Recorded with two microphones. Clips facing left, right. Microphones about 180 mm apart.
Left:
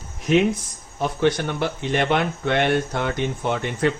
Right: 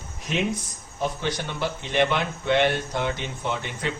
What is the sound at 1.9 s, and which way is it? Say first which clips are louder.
Speech: left 1 dB; 55° left (ahead or behind).